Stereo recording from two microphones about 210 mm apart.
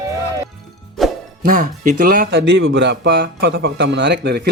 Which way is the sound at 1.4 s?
35° right (ahead or behind).